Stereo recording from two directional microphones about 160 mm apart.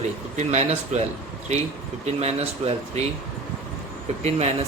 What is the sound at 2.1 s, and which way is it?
Speech, 40° right (ahead or behind).